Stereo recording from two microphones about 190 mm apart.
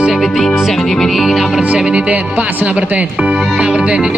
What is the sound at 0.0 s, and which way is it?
Speech, centre (ahead or behind).